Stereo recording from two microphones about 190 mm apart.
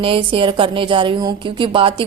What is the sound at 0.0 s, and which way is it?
A woman's voice, 30° right (ahead or behind).